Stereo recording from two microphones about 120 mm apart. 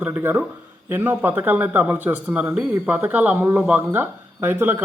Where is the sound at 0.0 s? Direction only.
20° right (ahead or behind).